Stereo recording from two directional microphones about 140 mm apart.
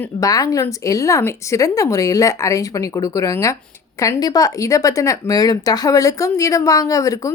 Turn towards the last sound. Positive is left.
turn(degrees=25)  # may be behind; listen again after turning